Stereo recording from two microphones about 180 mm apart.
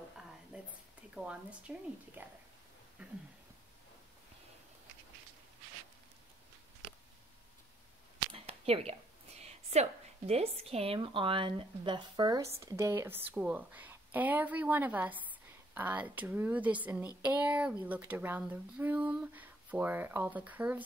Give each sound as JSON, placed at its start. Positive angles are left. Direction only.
{"t": 0.5, "sound": "a sound", "side_deg": -5}
{"t": 1.1, "sound": "speech", "side_deg": -5}
{"t": 8.3, "sound": "speech", "side_deg": -30}